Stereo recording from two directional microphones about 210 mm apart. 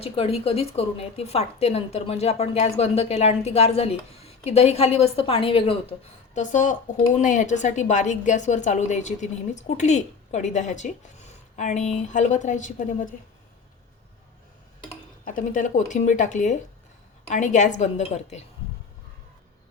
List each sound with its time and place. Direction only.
0.0 s a woman's voice: 30° left (ahead or behind)
15.2 s a woman's voice: 40° left (ahead or behind)